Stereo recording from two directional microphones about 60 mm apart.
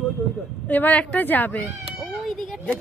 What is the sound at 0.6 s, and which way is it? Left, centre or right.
Speech, left.